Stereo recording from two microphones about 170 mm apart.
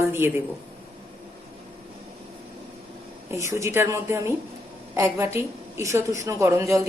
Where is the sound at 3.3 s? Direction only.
15° right (ahead or behind).